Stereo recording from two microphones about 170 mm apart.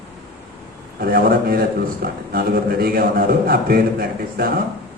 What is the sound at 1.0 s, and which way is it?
A man's voice, 60° right (ahead or behind).